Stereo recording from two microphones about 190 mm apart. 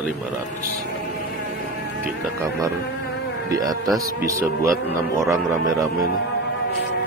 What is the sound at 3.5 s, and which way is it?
Speech, 20° right (ahead or behind).